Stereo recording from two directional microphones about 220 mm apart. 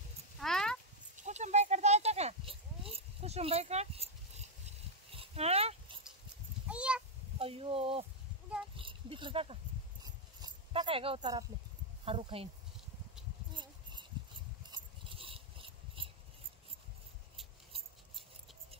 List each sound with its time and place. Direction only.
0.4 s cat: centre (ahead or behind)
1.1 s a sound: 30° right (ahead or behind)
5.1 s dog: 25° right (ahead or behind)
6.7 s a sound: 5° right (ahead or behind)
7.3 s speech: 25° right (ahead or behind)
8.7 s oink: 25° right (ahead or behind)
10.0 s dog: 20° right (ahead or behind)
12.0 s speech: 25° right (ahead or behind)
14.7 s a sound: 25° right (ahead or behind)